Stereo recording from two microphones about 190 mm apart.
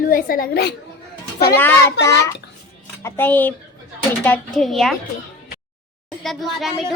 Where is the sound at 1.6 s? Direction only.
10° left (ahead or behind).